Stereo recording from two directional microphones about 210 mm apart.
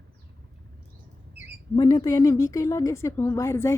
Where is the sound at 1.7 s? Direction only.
20° left (ahead or behind).